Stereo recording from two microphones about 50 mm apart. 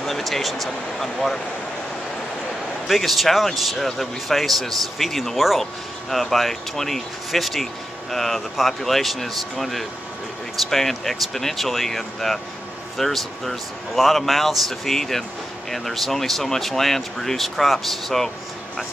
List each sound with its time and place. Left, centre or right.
0.0 s speech: centre
2.9 s speech: centre